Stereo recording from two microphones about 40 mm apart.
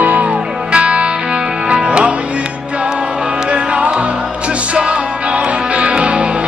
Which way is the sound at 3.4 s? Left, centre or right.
Right.